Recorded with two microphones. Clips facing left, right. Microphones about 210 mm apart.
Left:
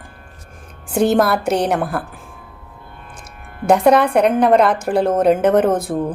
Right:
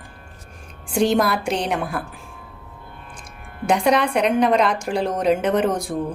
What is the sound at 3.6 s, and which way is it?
A woman's voice, 55° left (ahead or behind).